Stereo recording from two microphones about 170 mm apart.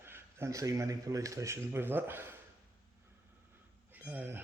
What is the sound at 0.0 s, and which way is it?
Speech, 15° right (ahead or behind).